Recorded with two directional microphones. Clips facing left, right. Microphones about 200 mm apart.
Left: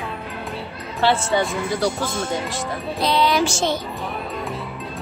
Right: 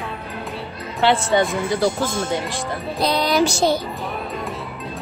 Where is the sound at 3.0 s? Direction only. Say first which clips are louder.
Right 1 dB; 40° right (ahead or behind).